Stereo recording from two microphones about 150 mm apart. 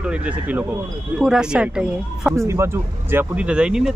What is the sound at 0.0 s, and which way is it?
Speech, 10° right (ahead or behind).